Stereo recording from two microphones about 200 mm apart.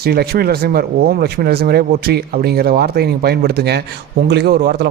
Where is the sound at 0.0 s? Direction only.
50° right (ahead or behind).